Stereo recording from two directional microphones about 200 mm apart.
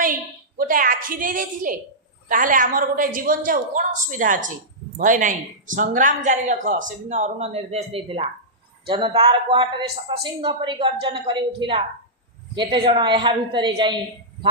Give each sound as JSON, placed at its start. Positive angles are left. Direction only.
{"t": 0.0, "sound": "a woman's voice", "side_deg": -45}